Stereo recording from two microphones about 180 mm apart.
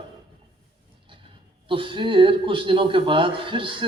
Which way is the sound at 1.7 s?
30° right (ahead or behind).